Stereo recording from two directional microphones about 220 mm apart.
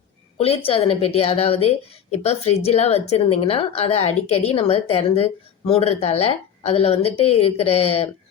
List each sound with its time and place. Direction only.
0.3 s a woman's voice: 25° left (ahead or behind)